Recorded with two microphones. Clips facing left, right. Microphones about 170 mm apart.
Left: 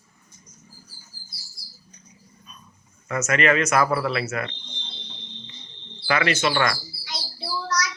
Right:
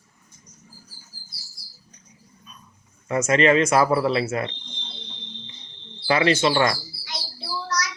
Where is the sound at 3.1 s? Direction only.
30° right (ahead or behind).